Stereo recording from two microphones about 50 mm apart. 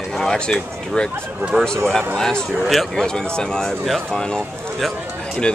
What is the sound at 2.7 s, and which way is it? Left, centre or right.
Speech, centre.